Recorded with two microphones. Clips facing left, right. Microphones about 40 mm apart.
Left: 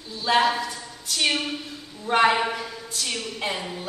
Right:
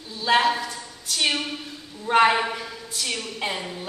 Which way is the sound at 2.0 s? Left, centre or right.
Centre.